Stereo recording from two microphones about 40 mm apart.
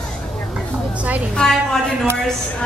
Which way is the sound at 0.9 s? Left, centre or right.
Right.